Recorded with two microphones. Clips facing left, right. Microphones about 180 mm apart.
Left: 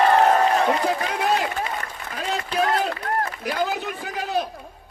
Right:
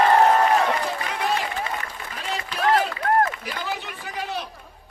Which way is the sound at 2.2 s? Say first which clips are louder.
Left 6 dB; 45° left (ahead or behind).